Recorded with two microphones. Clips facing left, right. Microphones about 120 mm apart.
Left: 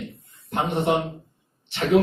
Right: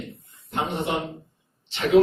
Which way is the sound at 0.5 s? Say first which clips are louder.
Left 4 dB; 55° left (ahead or behind).